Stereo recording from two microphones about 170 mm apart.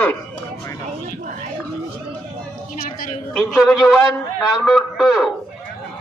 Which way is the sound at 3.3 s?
Centre (ahead or behind).